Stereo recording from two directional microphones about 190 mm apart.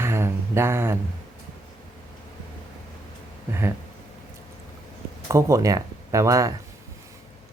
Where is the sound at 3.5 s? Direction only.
15° right (ahead or behind).